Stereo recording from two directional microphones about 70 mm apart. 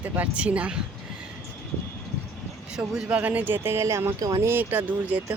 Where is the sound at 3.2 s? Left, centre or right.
Right.